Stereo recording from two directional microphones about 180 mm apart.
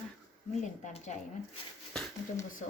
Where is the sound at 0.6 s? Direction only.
40° left (ahead or behind).